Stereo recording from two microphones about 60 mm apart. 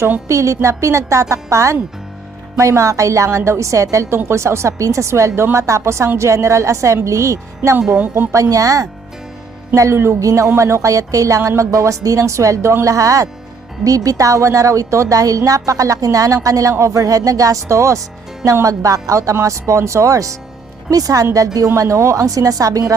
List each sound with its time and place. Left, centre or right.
0.3 s a woman's voice: right
3.2 s a woman's voice: right
4.1 s a woman's voice: right
9.7 s a woman's voice: right
13.8 s a woman's voice: right
18.6 s a woman's voice: right
20.9 s a woman's voice: right
21.8 s a woman's voice: right